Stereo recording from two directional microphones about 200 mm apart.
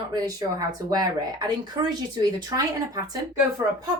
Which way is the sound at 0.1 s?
20° right (ahead or behind).